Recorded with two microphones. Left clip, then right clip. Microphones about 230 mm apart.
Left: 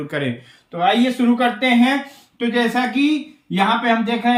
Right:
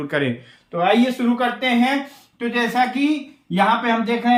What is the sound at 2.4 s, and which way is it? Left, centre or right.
A man's voice, centre.